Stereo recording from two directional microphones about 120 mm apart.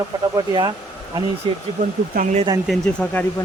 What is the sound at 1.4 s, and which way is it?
Speech, 45° right (ahead or behind).